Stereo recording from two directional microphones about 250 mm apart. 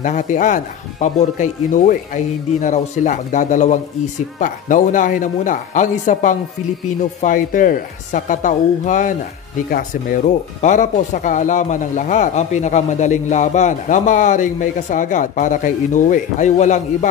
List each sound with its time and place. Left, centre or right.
0.0 s speech: left